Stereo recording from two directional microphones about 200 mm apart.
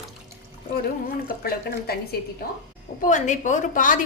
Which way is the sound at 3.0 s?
40° left (ahead or behind).